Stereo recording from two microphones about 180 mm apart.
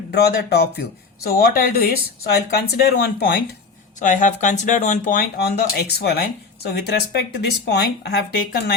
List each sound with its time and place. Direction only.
0.1 s speech: 65° left (ahead or behind)
4.0 s speech: 45° left (ahead or behind)
5.4 s speech: 65° left (ahead or behind)